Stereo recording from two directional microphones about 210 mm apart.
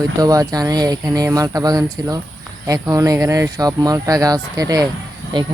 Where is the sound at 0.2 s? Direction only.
15° right (ahead or behind).